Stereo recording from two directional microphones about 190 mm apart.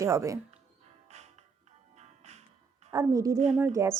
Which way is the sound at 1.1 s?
35° right (ahead or behind).